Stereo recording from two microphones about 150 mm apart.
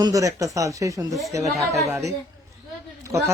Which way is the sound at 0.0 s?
20° right (ahead or behind).